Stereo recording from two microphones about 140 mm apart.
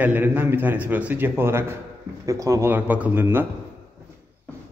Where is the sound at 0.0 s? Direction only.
10° right (ahead or behind).